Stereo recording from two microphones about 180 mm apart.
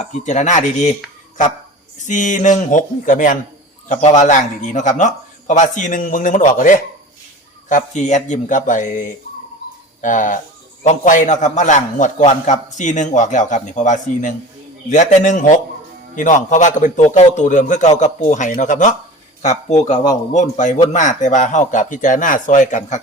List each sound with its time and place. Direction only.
0.0 s speech: 40° left (ahead or behind)
2.0 s a man's voice: 45° left (ahead or behind)